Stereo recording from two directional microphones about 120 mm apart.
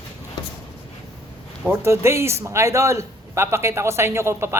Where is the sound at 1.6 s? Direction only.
20° right (ahead or behind).